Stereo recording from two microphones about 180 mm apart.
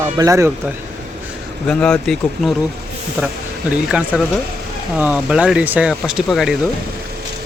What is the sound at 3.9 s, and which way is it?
Speech, 5° right (ahead or behind).